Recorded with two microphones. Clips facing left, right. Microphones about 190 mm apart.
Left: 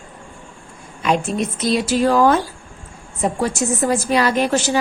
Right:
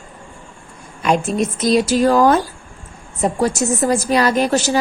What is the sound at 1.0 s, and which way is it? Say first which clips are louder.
A woman's voice: right 2 dB; 45° right (ahead or behind).